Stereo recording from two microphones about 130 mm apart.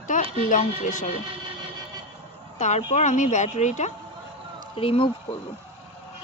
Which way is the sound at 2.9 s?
70° left (ahead or behind).